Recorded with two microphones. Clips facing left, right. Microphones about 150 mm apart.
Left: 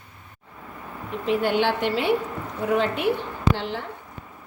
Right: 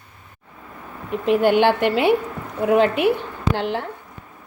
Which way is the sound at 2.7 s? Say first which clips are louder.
Right 6 dB; 65° right (ahead or behind).